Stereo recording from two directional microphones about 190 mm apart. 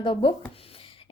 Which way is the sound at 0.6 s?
30° left (ahead or behind).